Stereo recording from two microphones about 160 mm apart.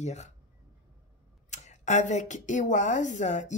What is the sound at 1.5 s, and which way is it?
A woman's voice, 45° left (ahead or behind).